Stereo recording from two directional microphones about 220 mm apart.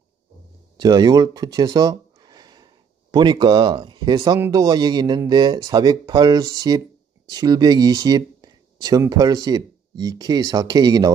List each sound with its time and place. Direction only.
0.7 s speech: 20° right (ahead or behind)